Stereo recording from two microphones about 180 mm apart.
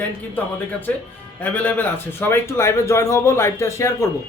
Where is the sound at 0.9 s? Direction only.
10° left (ahead or behind).